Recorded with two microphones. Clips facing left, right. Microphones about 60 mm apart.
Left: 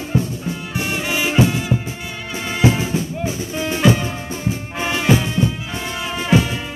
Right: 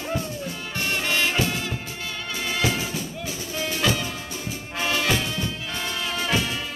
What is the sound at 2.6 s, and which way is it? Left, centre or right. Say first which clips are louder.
Music: left 9 dB; left.